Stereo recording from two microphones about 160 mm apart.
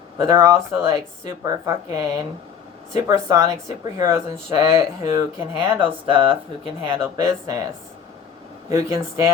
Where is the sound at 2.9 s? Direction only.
20° right (ahead or behind).